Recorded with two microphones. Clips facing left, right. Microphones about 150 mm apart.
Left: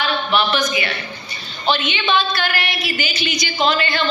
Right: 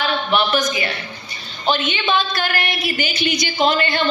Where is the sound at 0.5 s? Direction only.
40° right (ahead or behind).